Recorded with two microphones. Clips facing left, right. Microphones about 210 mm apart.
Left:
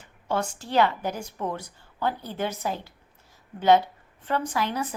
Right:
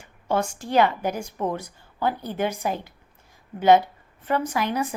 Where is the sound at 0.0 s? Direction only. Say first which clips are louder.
Right 3 dB; 10° right (ahead or behind).